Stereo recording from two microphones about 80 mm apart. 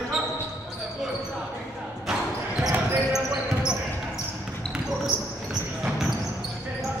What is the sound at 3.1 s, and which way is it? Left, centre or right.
Basketball bounce, centre.